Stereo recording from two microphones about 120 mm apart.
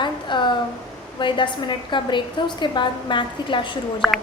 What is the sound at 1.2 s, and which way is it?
A woman's voice, 40° left (ahead or behind).